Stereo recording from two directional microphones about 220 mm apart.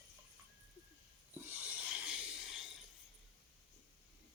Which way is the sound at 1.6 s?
5° right (ahead or behind).